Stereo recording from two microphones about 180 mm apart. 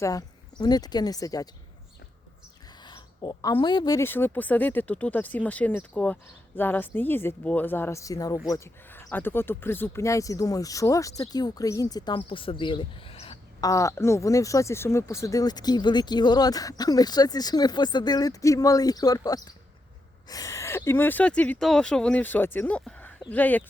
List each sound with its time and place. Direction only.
0.0 s speech: 20° left (ahead or behind)
2.8 s a woman's voice: 25° left (ahead or behind)
13.6 s a woman's voice: 20° left (ahead or behind)